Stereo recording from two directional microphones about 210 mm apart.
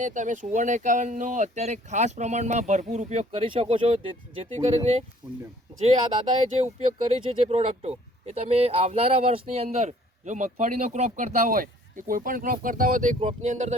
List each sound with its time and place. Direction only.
0.0 s speech: 35° right (ahead or behind)
6.6 s speech: 30° right (ahead or behind)